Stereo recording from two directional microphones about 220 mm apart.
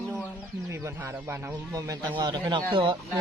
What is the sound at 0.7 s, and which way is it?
Speech, 10° right (ahead or behind).